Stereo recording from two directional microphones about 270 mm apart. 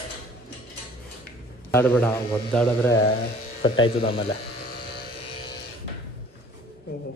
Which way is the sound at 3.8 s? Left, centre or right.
Centre.